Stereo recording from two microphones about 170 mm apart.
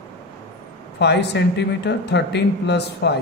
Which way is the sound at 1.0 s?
80° left.